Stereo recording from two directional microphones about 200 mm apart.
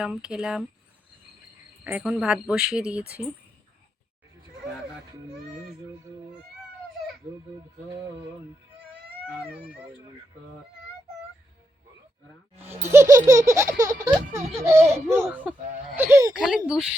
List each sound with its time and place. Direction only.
0.0 s a woman's voice: 5° right (ahead or behind)
1.8 s a woman's voice: 5° right (ahead or behind)
12.8 s a sound: 15° right (ahead or behind)
16.3 s a woman's voice: 5° right (ahead or behind)